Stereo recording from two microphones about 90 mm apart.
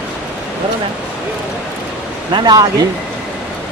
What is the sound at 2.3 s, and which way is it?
Speech, 50° right (ahead or behind).